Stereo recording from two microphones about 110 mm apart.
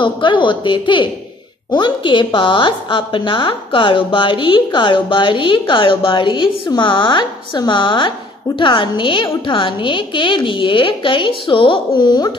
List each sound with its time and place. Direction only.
0.0 s a woman's voice: 45° left (ahead or behind)